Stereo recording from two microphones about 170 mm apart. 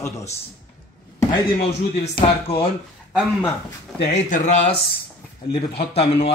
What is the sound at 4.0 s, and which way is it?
Speech, 40° left (ahead or behind).